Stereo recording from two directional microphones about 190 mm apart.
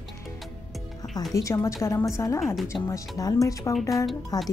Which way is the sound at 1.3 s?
15° left (ahead or behind).